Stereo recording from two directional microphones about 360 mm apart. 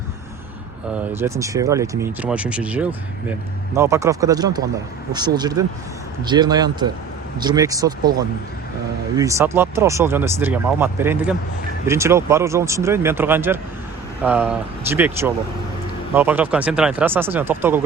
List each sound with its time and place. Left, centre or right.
0.9 s speech: centre